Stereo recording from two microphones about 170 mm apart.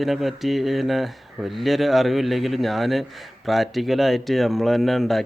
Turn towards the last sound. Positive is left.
turn(degrees=0)  # may be behind; listen again after turning